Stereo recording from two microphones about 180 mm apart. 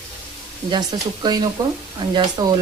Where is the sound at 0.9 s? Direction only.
25° right (ahead or behind).